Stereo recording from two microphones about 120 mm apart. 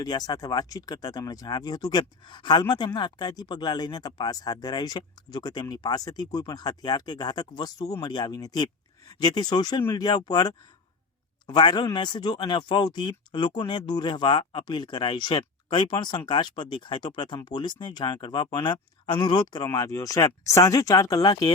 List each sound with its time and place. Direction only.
0.0 s speech: 35° left (ahead or behind)